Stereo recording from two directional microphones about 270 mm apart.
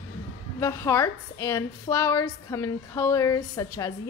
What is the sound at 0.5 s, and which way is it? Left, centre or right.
A woman's voice, centre.